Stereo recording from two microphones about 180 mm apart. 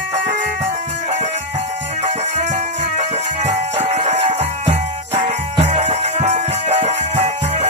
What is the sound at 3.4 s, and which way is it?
Music, 35° right (ahead or behind).